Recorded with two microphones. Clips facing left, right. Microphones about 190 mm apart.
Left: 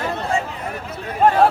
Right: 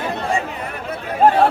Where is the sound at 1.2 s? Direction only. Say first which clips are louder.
Right 2 dB; 35° right (ahead or behind).